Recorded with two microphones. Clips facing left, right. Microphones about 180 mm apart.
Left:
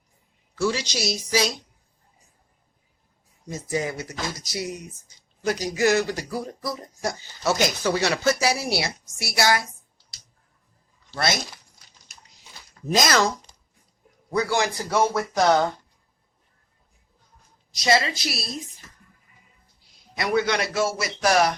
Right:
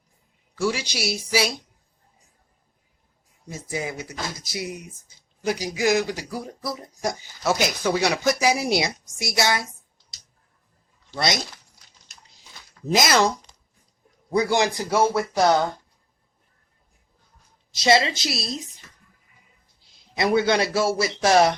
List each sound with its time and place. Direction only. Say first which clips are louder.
0.5 s speech: even; 10° right (ahead or behind)
3.5 s speech: left 3 dB; 10° right (ahead or behind)
12.8 s speech: right 1 dB; 15° right (ahead or behind)
14.3 s speech: right 3 dB; 15° right (ahead or behind)
17.7 s a man's voice: right 3 dB; 25° right (ahead or behind)
20.1 s a man's voice: right 3 dB; 30° right (ahead or behind)